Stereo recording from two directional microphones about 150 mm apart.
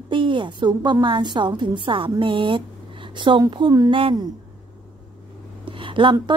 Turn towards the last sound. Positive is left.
turn(degrees=-35)  # may be behind; listen again after turning